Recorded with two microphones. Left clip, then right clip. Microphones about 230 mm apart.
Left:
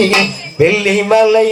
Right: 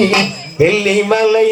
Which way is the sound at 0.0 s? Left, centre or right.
Left.